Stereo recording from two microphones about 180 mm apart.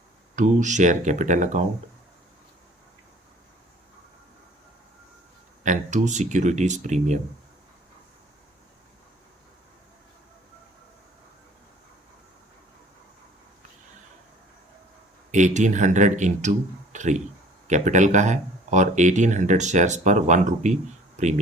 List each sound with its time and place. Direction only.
0.3 s speech: 45° right (ahead or behind)
5.6 s speech: 40° right (ahead or behind)
15.3 s speech: 40° right (ahead or behind)